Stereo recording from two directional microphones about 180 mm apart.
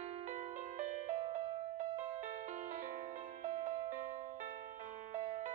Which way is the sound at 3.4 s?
45° right (ahead or behind).